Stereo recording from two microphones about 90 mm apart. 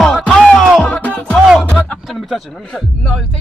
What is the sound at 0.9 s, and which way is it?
Music, 15° left (ahead or behind).